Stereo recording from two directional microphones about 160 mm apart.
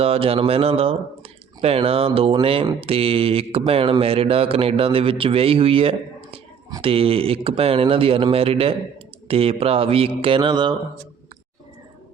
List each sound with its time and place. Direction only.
0.0 s a man's voice: 40° right (ahead or behind)